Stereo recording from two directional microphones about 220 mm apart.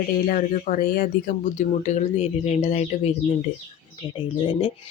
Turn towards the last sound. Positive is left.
turn(degrees=25)  # may be behind; listen again after turning